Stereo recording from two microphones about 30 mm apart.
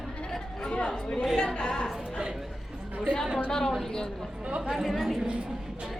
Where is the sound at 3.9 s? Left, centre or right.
Left.